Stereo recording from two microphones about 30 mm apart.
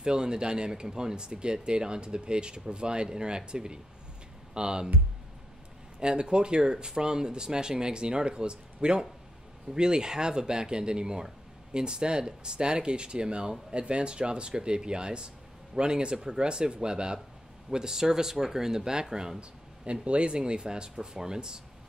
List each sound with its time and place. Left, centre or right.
0.0 s speech: right
5.9 s speech: right
19.8 s speech: right